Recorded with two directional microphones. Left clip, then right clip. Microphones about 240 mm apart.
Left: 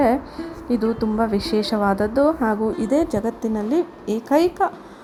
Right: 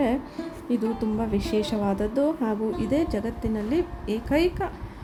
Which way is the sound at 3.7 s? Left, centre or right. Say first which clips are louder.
Left 4 dB; centre.